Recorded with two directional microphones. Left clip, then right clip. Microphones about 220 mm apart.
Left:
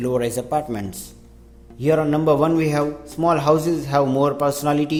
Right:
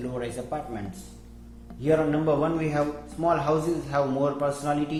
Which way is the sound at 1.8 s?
45° left (ahead or behind).